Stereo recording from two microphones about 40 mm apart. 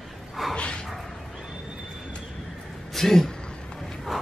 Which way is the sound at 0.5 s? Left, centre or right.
Left.